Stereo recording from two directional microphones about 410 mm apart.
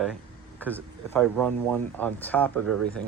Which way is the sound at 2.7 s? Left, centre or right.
Right.